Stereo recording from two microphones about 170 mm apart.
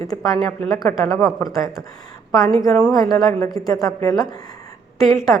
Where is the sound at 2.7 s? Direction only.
5° left (ahead or behind).